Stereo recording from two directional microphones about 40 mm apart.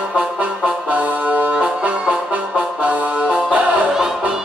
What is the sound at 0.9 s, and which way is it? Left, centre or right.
Music, right.